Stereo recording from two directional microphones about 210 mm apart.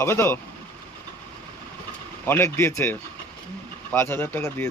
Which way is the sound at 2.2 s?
10° left (ahead or behind).